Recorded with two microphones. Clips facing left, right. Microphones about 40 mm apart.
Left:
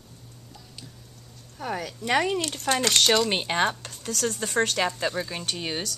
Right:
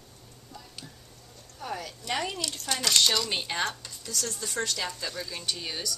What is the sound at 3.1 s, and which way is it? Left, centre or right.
Speech, left.